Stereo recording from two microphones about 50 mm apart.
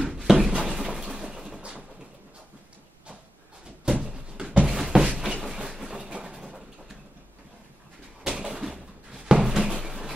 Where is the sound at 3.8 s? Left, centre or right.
Centre.